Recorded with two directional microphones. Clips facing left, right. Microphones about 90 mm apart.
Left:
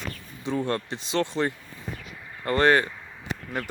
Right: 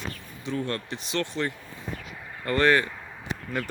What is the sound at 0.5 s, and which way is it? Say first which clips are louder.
Speech: left 3 dB; 15° left (ahead or behind).